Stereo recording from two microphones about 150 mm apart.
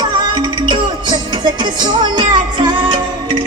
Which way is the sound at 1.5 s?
30° right (ahead or behind).